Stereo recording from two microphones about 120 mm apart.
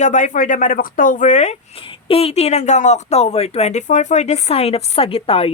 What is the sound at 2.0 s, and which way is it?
Speech, 55° left (ahead or behind).